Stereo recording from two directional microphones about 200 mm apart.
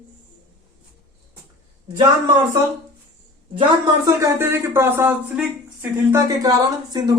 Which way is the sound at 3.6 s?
20° right (ahead or behind).